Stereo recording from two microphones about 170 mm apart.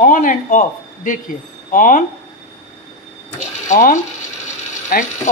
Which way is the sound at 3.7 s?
50° left (ahead or behind).